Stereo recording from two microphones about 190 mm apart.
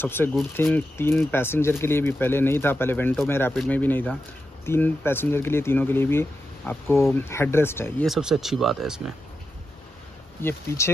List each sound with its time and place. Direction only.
0.0 s speech: 10° left (ahead or behind)
8.1 s speech: 5° right (ahead or behind)